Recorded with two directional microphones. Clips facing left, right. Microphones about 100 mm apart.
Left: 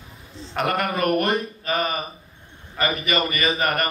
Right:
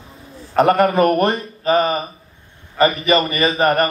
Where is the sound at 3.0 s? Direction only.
30° right (ahead or behind).